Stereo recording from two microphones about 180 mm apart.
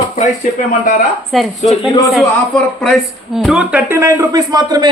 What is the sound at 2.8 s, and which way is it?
Speech, centre (ahead or behind).